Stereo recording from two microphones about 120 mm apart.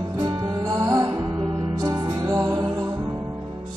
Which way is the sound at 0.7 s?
35° right (ahead or behind).